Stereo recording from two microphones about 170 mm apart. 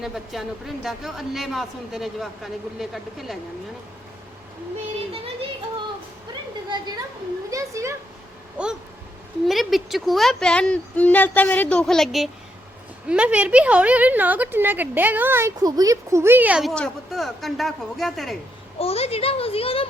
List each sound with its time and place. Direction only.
0.0 s speech: centre (ahead or behind)
5.1 s a sound: 35° right (ahead or behind)
7.5 s a woman's voice: 20° right (ahead or behind); by 18.3 s centre (ahead or behind)
18.8 s speech: 35° left (ahead or behind)